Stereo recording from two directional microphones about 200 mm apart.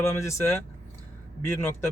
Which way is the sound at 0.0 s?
15° left (ahead or behind).